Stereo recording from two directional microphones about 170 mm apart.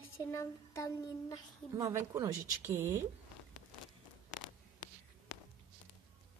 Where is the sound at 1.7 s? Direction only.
15° right (ahead or behind).